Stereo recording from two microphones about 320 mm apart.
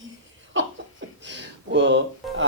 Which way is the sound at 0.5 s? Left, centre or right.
Right.